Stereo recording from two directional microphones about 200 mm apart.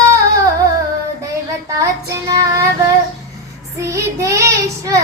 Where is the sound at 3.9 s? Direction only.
15° right (ahead or behind).